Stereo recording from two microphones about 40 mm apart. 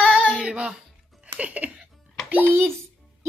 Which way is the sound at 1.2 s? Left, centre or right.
Right.